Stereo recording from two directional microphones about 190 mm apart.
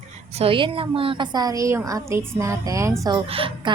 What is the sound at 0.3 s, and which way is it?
A woman's voice, 30° right (ahead or behind).